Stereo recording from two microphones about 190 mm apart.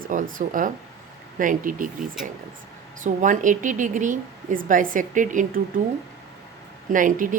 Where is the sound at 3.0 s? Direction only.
40° right (ahead or behind).